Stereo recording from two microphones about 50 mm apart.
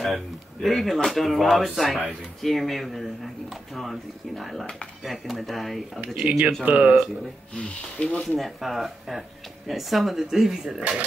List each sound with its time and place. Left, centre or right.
0.0 s speech: centre
6.1 s speech: right
7.5 s speech: left
8.4 s speech: centre